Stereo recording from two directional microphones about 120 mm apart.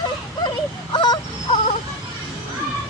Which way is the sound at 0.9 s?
35° left (ahead or behind).